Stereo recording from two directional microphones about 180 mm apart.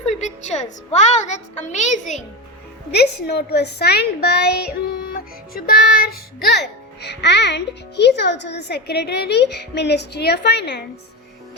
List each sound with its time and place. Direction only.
0.1 s a child's voice: 40° left (ahead or behind)
2.9 s a child's voice: 65° left (ahead or behind)